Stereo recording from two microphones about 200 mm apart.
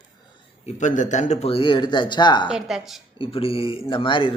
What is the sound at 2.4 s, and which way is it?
Speech, 5° right (ahead or behind).